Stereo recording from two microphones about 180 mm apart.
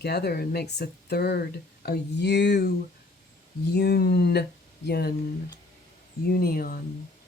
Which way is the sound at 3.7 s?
60° left (ahead or behind).